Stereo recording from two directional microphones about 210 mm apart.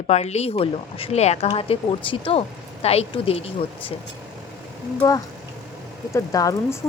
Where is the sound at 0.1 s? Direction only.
30° left (ahead or behind).